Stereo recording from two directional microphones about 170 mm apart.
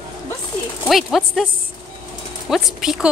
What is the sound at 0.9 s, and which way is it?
Speech, centre (ahead or behind).